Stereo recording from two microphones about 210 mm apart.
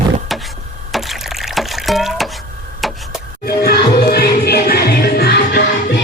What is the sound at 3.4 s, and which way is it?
Music, 45° left (ahead or behind).